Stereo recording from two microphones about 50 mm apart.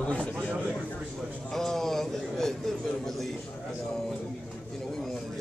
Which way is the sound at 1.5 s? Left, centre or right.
Centre.